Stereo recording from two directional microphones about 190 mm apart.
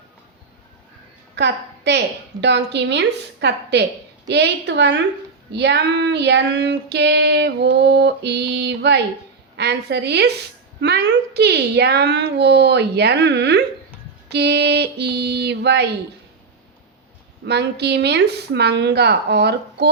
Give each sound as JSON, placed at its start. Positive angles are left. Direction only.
{"t": 1.4, "sound": "child singing", "side_deg": -65}
{"t": 17.4, "sound": "child singing", "side_deg": -60}